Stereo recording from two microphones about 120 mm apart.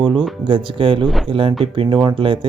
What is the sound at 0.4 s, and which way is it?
Speech, 45° right (ahead or behind).